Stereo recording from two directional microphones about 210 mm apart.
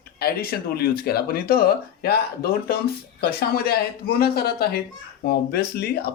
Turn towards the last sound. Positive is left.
turn(degrees=45)  # may be behind; listen again after turning